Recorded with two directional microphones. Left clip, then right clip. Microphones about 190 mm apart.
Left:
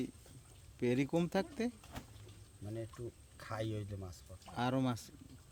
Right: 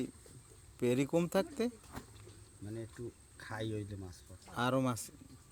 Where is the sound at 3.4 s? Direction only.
20° left (ahead or behind).